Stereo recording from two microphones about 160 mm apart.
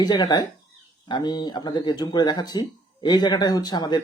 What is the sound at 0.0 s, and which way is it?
Speech, 25° left (ahead or behind).